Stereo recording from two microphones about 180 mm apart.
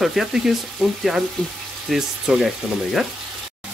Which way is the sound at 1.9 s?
5° right (ahead or behind).